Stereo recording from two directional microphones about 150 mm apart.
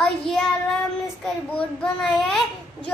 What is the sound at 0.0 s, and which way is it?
Child singing, 5° left (ahead or behind).